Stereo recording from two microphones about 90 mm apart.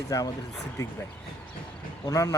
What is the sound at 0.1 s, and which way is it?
Speech, 40° left (ahead or behind).